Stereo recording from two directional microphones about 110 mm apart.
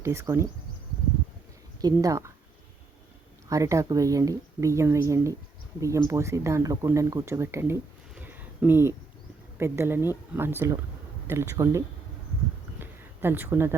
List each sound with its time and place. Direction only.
0.0 s speech: 25° right (ahead or behind)
1.8 s speech: 30° right (ahead or behind)
3.5 s speech: 30° right (ahead or behind)
8.1 s a sound: 15° right (ahead or behind)
9.6 s speech: 25° right (ahead or behind)
12.8 s a sound: 20° right (ahead or behind)